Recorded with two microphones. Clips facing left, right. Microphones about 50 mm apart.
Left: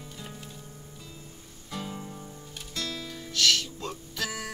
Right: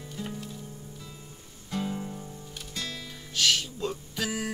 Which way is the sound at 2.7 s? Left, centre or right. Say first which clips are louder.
Left 3 dB; centre.